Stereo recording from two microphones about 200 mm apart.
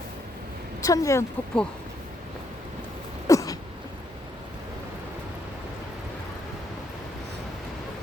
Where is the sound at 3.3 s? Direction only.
15° left (ahead or behind).